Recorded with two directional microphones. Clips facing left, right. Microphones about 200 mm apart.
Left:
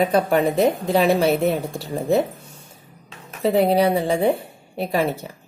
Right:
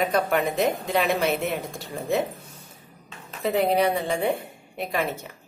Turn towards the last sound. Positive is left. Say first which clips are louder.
# left 6 dB
turn(degrees=35)  # may be behind; listen again after turning